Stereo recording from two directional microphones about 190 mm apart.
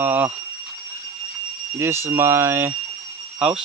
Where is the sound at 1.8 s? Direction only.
15° right (ahead or behind).